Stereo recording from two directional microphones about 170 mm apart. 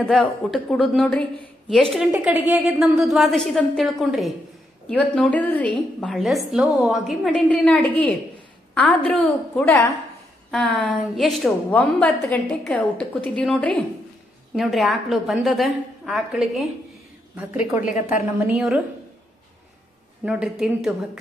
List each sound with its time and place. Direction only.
0.0 s a woman's voice: centre (ahead or behind)
2.0 s a woman's voice: 10° right (ahead or behind)
9.7 s a woman's voice: 15° left (ahead or behind)
10.5 s a woman's voice: 5° left (ahead or behind)
20.2 s a woman's voice: 5° right (ahead or behind)